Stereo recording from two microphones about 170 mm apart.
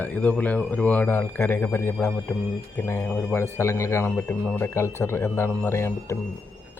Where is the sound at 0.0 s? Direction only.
10° left (ahead or behind).